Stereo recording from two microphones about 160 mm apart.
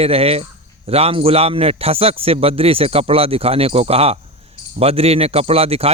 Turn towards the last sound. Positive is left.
turn(degrees=-40)  # may be behind; listen again after turning